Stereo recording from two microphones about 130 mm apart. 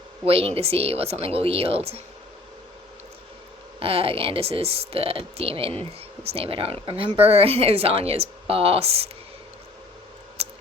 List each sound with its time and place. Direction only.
0.3 s speech: 45° right (ahead or behind)
3.8 s speech: 45° right (ahead or behind)
10.4 s a sound: 50° right (ahead or behind)